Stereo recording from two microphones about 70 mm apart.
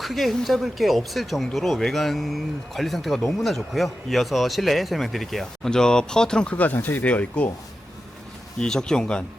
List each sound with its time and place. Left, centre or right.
0.0 s speech: centre; by 7.5 s left
8.5 s speech: centre